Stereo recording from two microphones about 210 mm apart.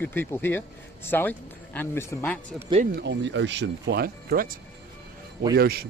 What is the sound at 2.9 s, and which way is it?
A man's voice, 60° right (ahead or behind).